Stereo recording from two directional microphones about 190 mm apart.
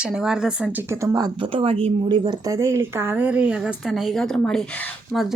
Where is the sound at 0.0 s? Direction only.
5° right (ahead or behind).